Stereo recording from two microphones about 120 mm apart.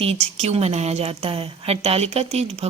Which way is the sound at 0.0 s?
60° right (ahead or behind).